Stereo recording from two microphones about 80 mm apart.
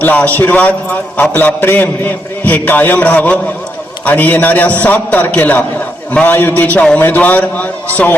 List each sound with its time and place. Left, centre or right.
0.0 s a man's voice: centre